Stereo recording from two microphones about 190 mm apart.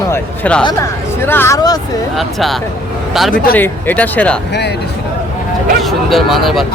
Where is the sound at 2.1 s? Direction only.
Centre (ahead or behind).